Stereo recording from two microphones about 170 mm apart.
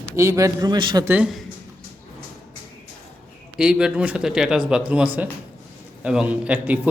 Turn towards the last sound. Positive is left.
turn(degrees=-10)  # may be behind; listen again after turning